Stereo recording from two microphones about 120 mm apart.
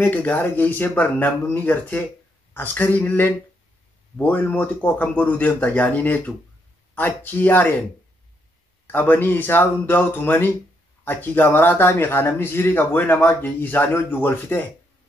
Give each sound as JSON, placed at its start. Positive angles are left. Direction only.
{"t": 0.0, "sound": "speech", "side_deg": 15}
{"t": 8.8, "sound": "speech", "side_deg": 15}